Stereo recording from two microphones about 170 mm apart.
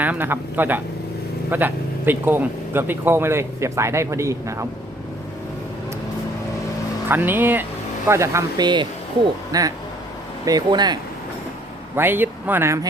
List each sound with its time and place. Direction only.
0.0 s speech: 10° right (ahead or behind)
7.1 s speech: 10° right (ahead or behind)
11.9 s speech: 10° right (ahead or behind)